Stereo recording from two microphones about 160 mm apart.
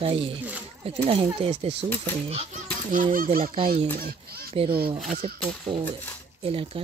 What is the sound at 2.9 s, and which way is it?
Speech, 60° right (ahead or behind).